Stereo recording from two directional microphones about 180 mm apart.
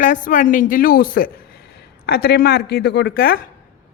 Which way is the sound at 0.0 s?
45° left (ahead or behind).